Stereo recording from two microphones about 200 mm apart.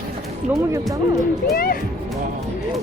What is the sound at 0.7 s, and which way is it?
Speech, 15° right (ahead or behind).